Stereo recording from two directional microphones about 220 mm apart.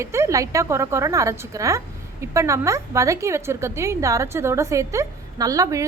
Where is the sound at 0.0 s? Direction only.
10° right (ahead or behind).